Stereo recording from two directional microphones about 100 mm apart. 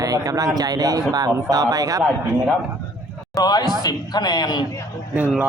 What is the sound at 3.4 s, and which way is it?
A man's voice, 40° left (ahead or behind).